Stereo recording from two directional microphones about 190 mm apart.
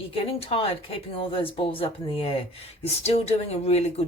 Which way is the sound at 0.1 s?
30° left (ahead or behind).